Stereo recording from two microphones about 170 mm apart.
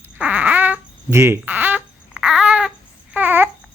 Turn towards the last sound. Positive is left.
turn(degrees=-10)  # may be behind; listen again after turning